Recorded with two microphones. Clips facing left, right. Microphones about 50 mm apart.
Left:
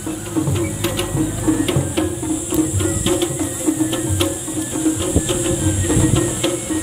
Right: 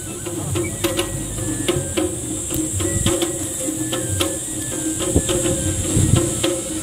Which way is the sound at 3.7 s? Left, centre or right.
Left.